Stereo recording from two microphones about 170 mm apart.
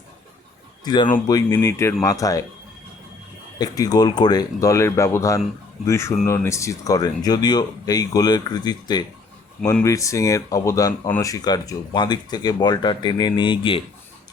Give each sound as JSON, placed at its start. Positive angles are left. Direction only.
{"t": 1.1, "sound": "speech", "side_deg": 20}
{"t": 3.6, "sound": "speech", "side_deg": 25}